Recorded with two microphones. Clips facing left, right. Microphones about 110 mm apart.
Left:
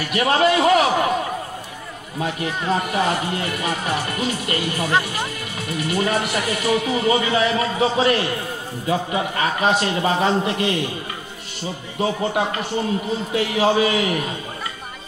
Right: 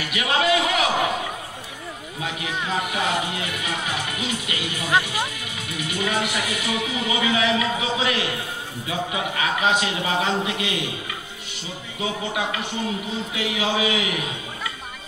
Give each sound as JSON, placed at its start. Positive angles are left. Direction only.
{"t": 0.0, "sound": "a man's voice", "side_deg": 45}
{"t": 2.2, "sound": "speech", "side_deg": 45}
{"t": 12.0, "sound": "speech", "side_deg": 45}